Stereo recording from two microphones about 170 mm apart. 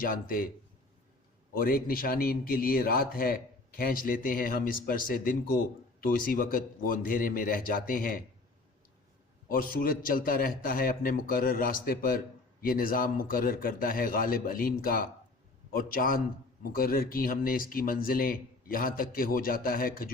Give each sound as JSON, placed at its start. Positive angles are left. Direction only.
{"t": 0.0, "sound": "a man's voice", "side_deg": 55}
{"t": 1.5, "sound": "a man's voice", "side_deg": 60}
{"t": 9.5, "sound": "a man's voice", "side_deg": 55}